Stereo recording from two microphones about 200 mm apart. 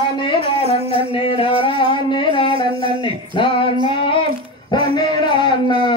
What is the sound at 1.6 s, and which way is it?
Music, 25° left (ahead or behind).